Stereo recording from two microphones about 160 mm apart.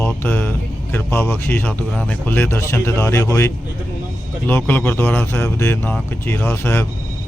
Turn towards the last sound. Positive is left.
turn(degrees=15)  # may be behind; listen again after turning